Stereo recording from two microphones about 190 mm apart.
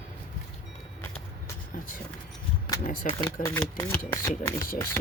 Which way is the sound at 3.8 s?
15° left (ahead or behind).